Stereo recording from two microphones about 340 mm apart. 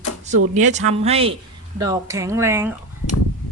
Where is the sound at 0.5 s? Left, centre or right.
Right.